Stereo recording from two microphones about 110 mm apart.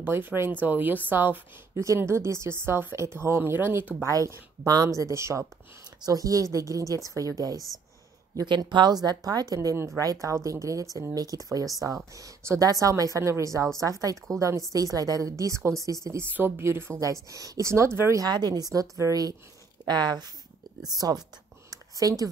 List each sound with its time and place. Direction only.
0.0 s speech: 15° right (ahead or behind)
4.1 s speech: 30° right (ahead or behind)
8.4 s speech: 40° right (ahead or behind); by 18.2 s 25° right (ahead or behind)
18.2 s speech: 40° right (ahead or behind)
21.6 s a sound: 35° right (ahead or behind)